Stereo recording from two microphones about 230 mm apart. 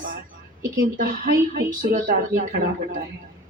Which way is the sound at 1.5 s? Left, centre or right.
Right.